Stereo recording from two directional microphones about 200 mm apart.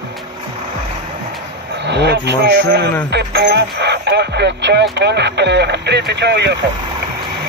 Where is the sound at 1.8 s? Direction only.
60° right (ahead or behind).